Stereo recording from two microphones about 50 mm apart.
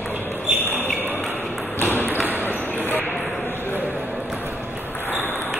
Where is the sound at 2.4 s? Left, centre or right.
Left.